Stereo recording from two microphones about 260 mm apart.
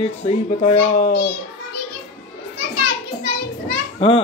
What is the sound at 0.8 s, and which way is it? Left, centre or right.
Speech, left.